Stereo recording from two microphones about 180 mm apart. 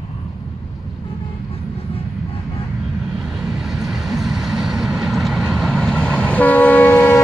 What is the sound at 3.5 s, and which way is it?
Vehicle, centre (ahead or behind).